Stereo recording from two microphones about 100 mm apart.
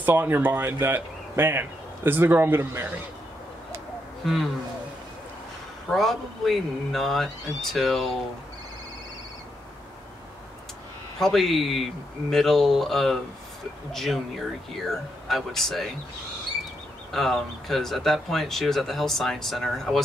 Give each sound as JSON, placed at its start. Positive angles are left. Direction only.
{"t": 0.0, "sound": "speech", "side_deg": -20}
{"t": 4.2, "sound": "a man's voice", "side_deg": 0}
{"t": 5.9, "sound": "speech", "side_deg": 0}
{"t": 11.1, "sound": "speech", "side_deg": 5}
{"t": 17.1, "sound": "speech", "side_deg": 0}